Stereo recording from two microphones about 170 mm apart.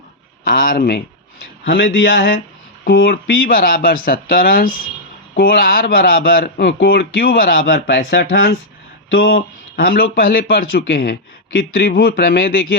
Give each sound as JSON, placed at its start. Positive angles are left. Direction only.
{"t": 0.4, "sound": "speech", "side_deg": 55}
{"t": 9.7, "sound": "speech", "side_deg": 60}